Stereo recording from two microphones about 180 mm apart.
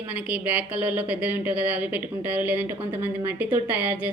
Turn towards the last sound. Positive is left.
turn(degrees=-10)  # may be behind; listen again after turning